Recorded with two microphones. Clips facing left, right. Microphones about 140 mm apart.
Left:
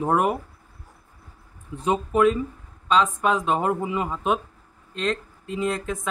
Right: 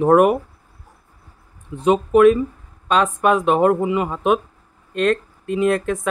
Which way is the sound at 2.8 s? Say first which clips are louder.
Right 4 dB; 60° right (ahead or behind).